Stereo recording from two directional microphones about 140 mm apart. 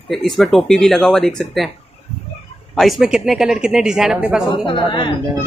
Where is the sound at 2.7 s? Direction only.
Centre (ahead or behind).